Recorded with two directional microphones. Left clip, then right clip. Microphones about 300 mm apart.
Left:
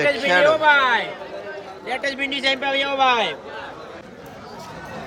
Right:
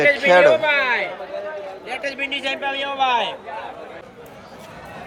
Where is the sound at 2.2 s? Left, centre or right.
Left.